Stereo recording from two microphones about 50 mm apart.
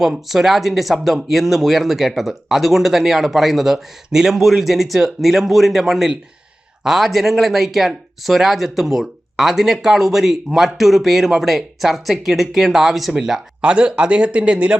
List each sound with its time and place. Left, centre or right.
0.3 s speech: centre
13.6 s speech: right